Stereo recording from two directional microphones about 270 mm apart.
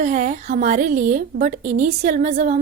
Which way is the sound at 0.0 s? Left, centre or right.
Right.